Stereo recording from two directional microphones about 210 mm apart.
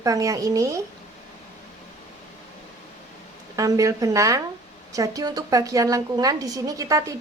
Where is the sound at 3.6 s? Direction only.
15° right (ahead or behind).